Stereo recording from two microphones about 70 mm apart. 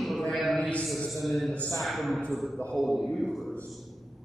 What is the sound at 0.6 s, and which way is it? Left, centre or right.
Speech, centre.